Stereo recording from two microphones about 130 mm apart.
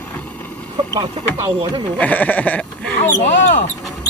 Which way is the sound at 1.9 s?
10° left (ahead or behind).